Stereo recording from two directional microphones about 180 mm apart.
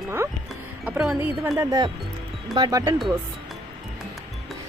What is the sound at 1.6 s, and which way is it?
Speech, 20° right (ahead or behind).